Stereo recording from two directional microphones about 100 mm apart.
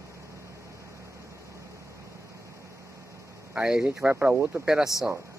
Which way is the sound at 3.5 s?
10° right (ahead or behind).